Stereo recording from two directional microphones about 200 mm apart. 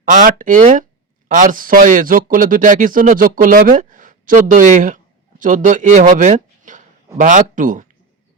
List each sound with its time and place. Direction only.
0.0 s speech: 40° right (ahead or behind)